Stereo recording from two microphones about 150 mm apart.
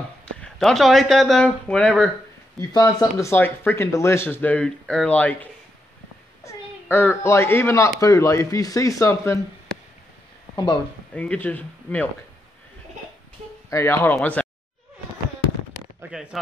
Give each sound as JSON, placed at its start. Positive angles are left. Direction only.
{"t": 0.2, "sound": "speech", "side_deg": 5}
{"t": 2.7, "sound": "speech", "side_deg": 25}
{"t": 10.5, "sound": "speech", "side_deg": 30}
{"t": 11.1, "sound": "speech", "side_deg": 10}
{"t": 13.7, "sound": "speech", "side_deg": 20}
{"t": 16.0, "sound": "speech", "side_deg": -5}